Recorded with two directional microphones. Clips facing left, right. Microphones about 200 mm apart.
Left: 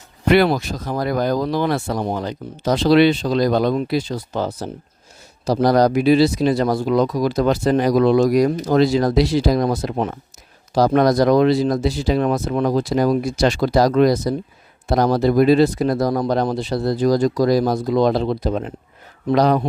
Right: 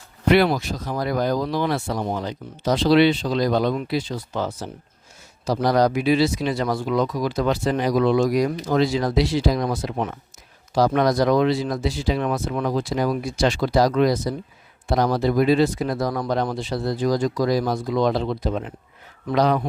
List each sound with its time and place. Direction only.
0.3 s speech: 45° left (ahead or behind)